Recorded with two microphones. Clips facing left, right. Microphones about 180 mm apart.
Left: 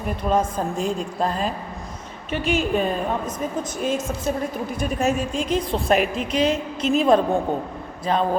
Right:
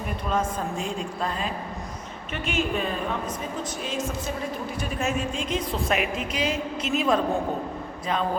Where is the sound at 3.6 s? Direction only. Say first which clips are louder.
Left 5 dB; 50° left (ahead or behind).